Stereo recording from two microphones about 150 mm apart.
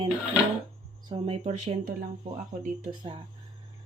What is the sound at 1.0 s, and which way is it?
Speech, 35° right (ahead or behind).